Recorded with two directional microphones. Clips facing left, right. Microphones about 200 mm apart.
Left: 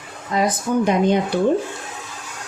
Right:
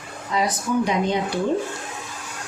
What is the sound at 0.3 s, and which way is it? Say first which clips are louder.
Speech: left 3 dB; 50° left (ahead or behind).